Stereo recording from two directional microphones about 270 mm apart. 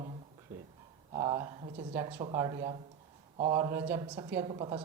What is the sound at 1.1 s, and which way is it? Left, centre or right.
Speech, centre.